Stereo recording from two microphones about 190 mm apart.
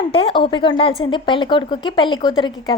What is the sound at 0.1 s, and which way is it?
A woman's voice, 30° left (ahead or behind).